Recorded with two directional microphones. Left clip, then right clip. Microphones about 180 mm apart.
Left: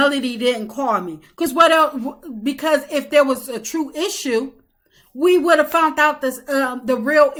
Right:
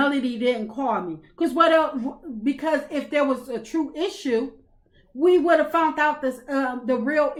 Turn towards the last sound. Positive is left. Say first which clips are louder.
# left 7 dB
turn(degrees=20)  # may be behind; listen again after turning